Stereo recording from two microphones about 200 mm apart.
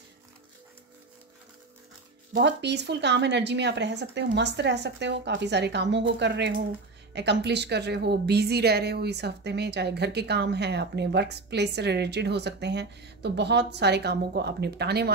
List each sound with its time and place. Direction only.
2.3 s a woman's voice: 60° right (ahead or behind)